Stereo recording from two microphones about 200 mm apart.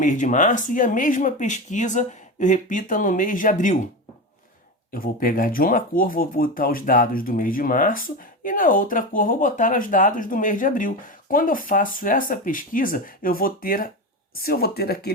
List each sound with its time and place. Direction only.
0.0 s speech: 40° left (ahead or behind)
4.9 s speech: 45° left (ahead or behind)